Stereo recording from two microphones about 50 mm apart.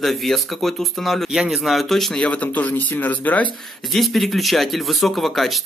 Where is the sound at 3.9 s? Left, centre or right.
Centre.